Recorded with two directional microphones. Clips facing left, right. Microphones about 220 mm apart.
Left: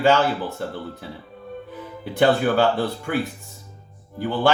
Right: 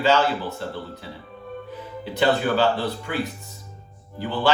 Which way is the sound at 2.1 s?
50° left (ahead or behind).